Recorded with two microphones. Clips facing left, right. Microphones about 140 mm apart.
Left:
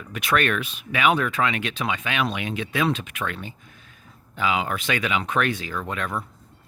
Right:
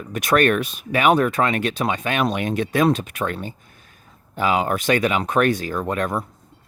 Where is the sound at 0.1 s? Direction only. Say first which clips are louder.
Right 6 dB; 40° right (ahead or behind).